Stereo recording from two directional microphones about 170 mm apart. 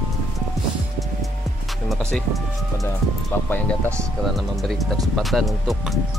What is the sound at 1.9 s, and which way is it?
Music, centre (ahead or behind).